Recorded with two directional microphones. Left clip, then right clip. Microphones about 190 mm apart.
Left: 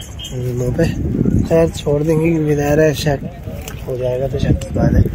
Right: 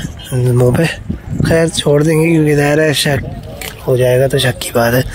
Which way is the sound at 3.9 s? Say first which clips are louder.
Right 8 dB; 35° right (ahead or behind).